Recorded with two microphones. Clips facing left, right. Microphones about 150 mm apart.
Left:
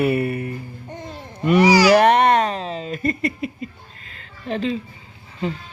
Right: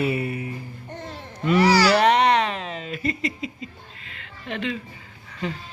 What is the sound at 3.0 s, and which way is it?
Speech, 55° left (ahead or behind).